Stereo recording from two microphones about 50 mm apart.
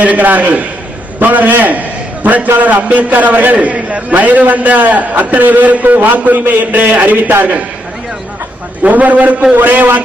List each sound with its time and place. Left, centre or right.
0.0 s a man's voice: right
8.8 s a man's voice: right